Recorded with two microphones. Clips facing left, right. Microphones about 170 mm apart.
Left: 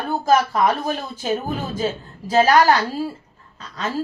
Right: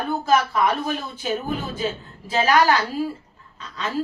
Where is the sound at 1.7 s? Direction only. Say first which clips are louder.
Left 3 dB; 40° left (ahead or behind).